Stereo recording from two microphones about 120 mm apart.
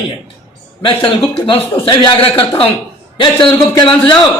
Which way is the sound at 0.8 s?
40° left (ahead or behind).